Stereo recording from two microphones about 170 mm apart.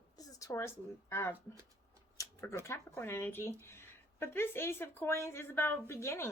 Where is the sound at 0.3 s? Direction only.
15° left (ahead or behind).